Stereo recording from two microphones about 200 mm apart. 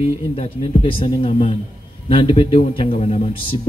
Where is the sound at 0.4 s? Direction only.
30° left (ahead or behind).